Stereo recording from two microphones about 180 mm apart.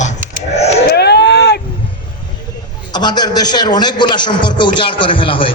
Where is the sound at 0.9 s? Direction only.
65° left (ahead or behind).